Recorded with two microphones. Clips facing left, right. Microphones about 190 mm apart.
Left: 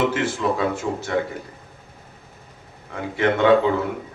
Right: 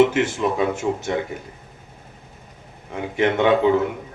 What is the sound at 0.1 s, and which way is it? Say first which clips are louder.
Speech: right 1 dB; 20° right (ahead or behind).